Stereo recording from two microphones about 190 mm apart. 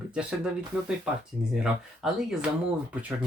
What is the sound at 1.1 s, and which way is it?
Speech, 5° right (ahead or behind).